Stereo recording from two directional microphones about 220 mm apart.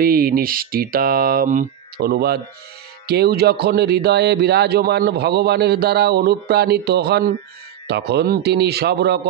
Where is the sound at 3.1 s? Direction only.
45° right (ahead or behind).